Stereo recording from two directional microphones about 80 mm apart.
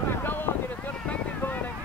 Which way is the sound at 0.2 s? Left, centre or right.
Left.